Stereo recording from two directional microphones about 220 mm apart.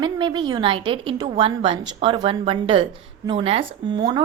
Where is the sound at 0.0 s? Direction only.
20° right (ahead or behind).